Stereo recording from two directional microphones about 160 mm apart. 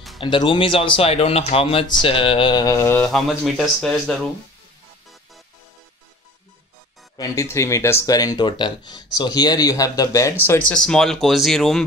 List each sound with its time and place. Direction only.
0.2 s speech: 30° left (ahead or behind)
3.1 s speech: centre (ahead or behind)
7.2 s speech: 20° left (ahead or behind); by 11.8 s centre (ahead or behind)